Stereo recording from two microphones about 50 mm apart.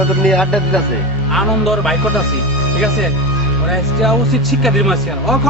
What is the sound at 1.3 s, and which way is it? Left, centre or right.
Speech, centre.